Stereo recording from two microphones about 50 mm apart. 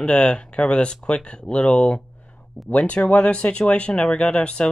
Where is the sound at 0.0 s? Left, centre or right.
Centre.